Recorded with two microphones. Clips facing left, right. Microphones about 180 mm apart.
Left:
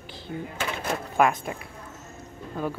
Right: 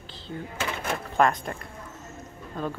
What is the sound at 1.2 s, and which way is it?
Speech, 5° left (ahead or behind).